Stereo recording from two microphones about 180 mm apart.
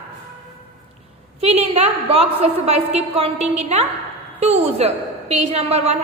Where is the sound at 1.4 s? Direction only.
35° right (ahead or behind).